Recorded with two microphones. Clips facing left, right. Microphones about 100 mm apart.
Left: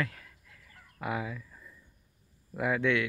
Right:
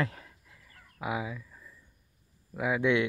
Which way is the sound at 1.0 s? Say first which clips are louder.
Right 1 dB; 10° right (ahead or behind).